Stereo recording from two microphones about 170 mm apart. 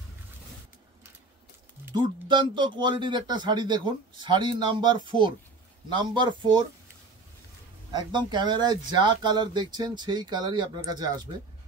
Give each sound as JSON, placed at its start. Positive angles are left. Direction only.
{"t": 2.0, "sound": "speech", "side_deg": -25}
{"t": 7.9, "sound": "speech", "side_deg": -25}